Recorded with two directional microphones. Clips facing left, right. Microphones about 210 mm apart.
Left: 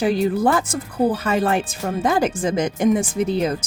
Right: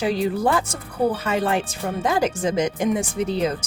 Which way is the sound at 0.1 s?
50° left (ahead or behind).